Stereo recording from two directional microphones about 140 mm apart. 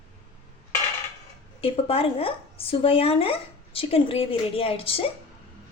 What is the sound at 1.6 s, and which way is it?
A woman's voice, 40° left (ahead or behind).